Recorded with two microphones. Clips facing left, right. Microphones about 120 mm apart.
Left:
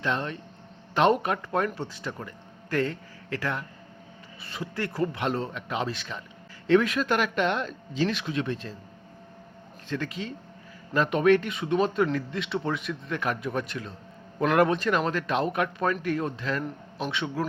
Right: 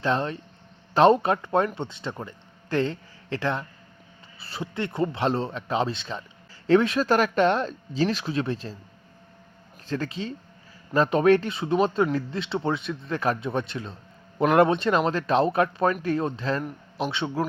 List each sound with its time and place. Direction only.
0.0 s speech: 30° right (ahead or behind)
9.9 s speech: 30° right (ahead or behind)